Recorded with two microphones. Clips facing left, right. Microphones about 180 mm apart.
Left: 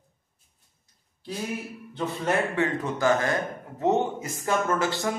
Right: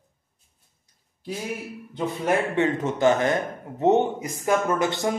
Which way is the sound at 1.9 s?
20° right (ahead or behind).